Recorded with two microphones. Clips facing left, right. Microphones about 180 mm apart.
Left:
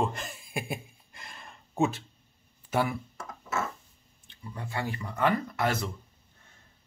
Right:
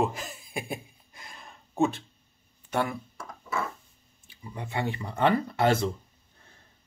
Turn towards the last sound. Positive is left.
turn(degrees=-30)  # may be behind; listen again after turning